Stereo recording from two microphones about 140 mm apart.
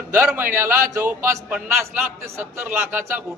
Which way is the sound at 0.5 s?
20° right (ahead or behind).